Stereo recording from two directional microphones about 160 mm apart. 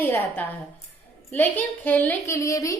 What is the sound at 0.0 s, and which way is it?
A woman's voice, 10° left (ahead or behind).